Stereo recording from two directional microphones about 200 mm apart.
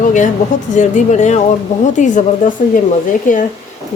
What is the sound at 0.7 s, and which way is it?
Speech, 40° left (ahead or behind).